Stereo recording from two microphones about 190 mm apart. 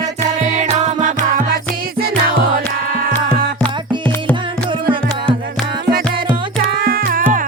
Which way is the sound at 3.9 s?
25° right (ahead or behind).